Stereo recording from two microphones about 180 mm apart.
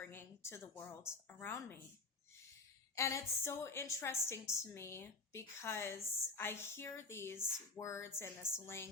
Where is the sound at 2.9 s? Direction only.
15° left (ahead or behind).